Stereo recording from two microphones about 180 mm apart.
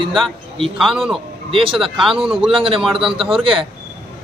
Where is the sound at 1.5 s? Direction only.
30° right (ahead or behind).